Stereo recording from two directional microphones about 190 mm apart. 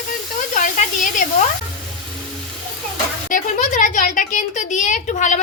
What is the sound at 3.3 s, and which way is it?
A woman's voice, 45° left (ahead or behind).